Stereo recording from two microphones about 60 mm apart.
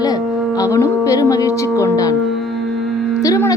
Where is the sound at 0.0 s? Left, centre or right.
Left.